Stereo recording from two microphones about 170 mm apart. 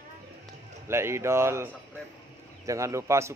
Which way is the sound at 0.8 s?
15° right (ahead or behind).